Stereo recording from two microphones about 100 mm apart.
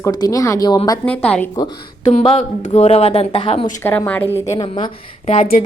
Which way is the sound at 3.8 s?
20° left (ahead or behind).